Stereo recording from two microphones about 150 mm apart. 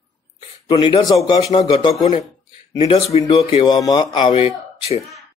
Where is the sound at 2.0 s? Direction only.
55° left (ahead or behind).